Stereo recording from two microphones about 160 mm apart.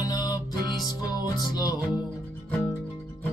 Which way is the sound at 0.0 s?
25° left (ahead or behind).